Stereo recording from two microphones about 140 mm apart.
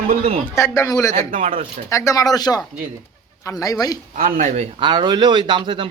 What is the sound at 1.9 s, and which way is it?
Speech, 20° left (ahead or behind).